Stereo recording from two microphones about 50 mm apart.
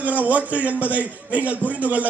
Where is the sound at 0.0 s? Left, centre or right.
Right.